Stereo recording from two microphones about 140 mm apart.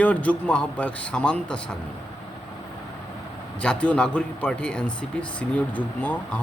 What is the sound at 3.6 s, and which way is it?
Speech, 10° left (ahead or behind).